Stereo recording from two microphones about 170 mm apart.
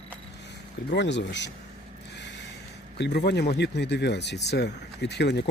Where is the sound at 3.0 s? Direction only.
90° left.